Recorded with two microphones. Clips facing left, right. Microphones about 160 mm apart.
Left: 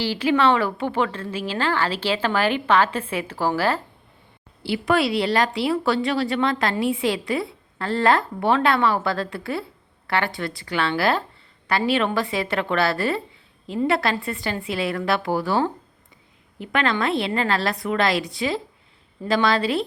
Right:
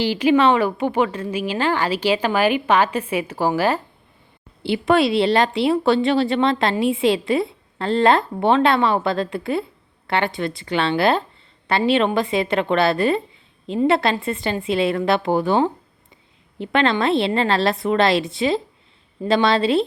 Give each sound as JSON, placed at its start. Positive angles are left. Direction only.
{"t": 0.0, "sound": "a woman's voice", "side_deg": -15}